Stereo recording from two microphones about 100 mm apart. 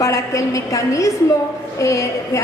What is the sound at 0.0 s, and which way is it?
A woman's voice, 35° left (ahead or behind).